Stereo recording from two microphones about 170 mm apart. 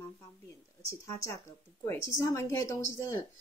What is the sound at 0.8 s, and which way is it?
Speech, 20° left (ahead or behind).